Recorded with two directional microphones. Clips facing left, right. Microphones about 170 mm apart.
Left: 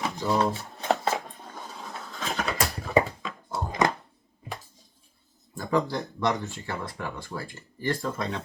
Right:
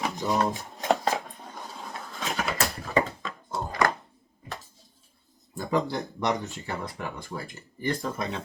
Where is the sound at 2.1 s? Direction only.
5° right (ahead or behind).